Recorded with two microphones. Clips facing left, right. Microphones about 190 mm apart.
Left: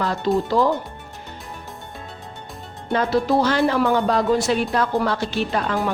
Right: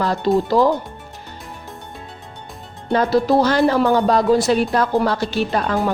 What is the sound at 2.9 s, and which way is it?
Speech, 35° right (ahead or behind).